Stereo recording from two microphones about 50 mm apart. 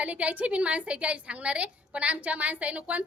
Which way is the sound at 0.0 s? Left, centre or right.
Right.